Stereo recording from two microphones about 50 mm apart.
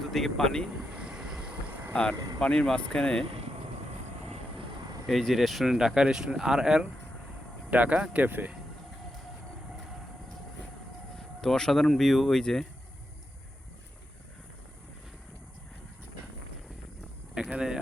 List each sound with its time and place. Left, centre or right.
0.1 s speech: centre
0.9 s train: right
1.9 s speech: left
5.0 s speech: centre
5.6 s speech: centre
7.7 s speech: right
11.3 s speech: centre
17.5 s speech: centre